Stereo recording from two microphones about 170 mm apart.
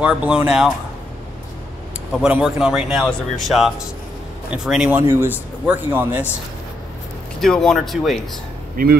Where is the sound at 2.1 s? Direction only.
5° right (ahead or behind).